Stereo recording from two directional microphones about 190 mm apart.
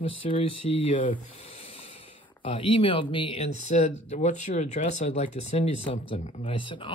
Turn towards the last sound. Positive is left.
turn(degrees=25)  # may be behind; listen again after turning